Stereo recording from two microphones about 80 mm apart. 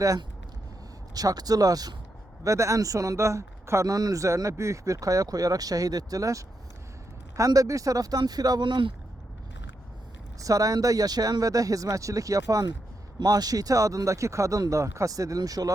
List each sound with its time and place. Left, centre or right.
1.1 s speech: right
2.4 s speech: right
8.6 s speech: right
10.4 s speech: right